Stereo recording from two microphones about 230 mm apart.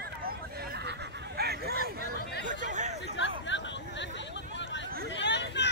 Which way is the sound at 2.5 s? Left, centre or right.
Right.